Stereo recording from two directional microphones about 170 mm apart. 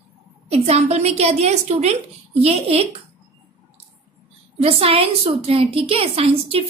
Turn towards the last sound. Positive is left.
turn(degrees=-35)  # may be behind; listen again after turning